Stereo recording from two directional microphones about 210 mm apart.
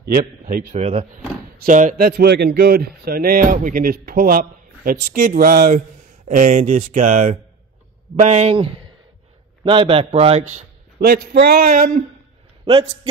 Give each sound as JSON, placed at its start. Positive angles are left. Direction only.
{"t": 0.0, "sound": "a man's voice", "side_deg": -45}
{"t": 11.0, "sound": "speech", "side_deg": -50}
{"t": 12.6, "sound": "a man's voice", "side_deg": -25}